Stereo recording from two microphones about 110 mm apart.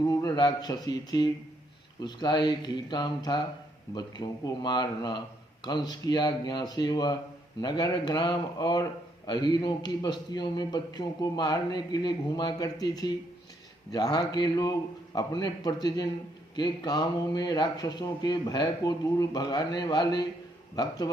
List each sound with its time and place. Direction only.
0.0 s a man's voice: 35° left (ahead or behind)